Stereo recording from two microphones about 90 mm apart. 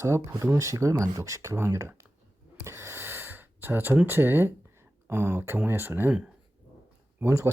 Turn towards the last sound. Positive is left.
turn(degrees=-30)  # may be behind; listen again after turning